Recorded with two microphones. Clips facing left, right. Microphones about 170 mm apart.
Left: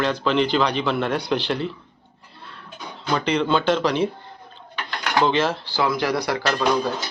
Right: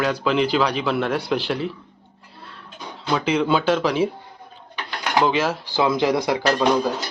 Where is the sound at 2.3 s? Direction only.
Centre (ahead or behind).